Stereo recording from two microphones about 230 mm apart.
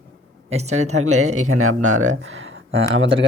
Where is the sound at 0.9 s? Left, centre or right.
Right.